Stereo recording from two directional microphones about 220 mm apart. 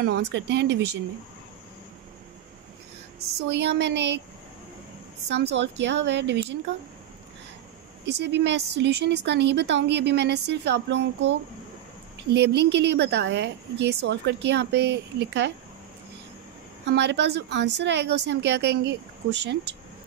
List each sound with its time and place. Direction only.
0.0 s speech: 50° right (ahead or behind)
3.4 s speech: 50° right (ahead or behind)
5.3 s speech: 50° right (ahead or behind)
8.0 s speech: 50° right (ahead or behind)
16.8 s speech: 50° right (ahead or behind)